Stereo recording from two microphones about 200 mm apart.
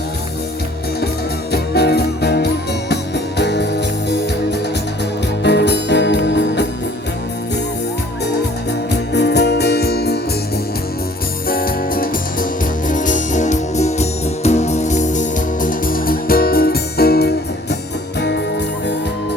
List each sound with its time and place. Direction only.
1.5 s music: 55° left (ahead or behind)
5.4 s music: 60° left (ahead or behind)
9.1 s music: 55° left (ahead or behind)
11.4 s music: 45° left (ahead or behind)